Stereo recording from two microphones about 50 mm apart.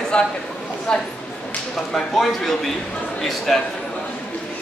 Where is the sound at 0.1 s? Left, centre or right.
Centre.